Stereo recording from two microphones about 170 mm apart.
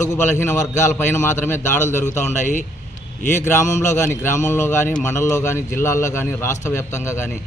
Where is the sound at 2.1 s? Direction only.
45° left (ahead or behind).